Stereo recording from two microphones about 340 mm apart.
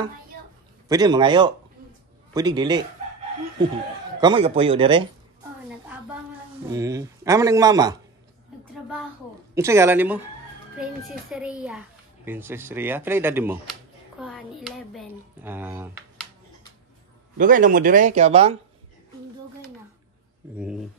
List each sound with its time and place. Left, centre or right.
0.8 s speech: centre
4.2 s speech: centre
5.9 s a sound: centre
6.7 s speech: centre
9.6 s speech: centre
11.3 s a child's voice: centre
17.4 s speech: right
20.5 s a child's voice: centre